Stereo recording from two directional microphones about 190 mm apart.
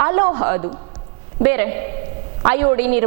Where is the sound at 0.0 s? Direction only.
15° right (ahead or behind).